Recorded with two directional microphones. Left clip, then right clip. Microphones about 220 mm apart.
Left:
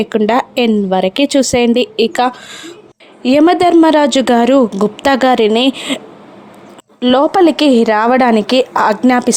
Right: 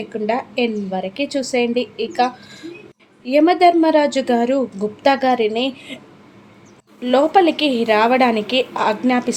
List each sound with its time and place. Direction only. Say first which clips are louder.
0.0 s a woman's voice: left 9 dB; 40° left (ahead or behind)
7.0 s a woman's voice: left 4 dB; 30° left (ahead or behind)